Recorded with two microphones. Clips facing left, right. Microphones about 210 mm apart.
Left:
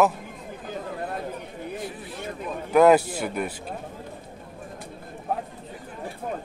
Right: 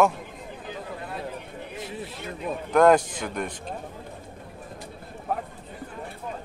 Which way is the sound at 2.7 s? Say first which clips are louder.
Left 2 dB; 5° left (ahead or behind).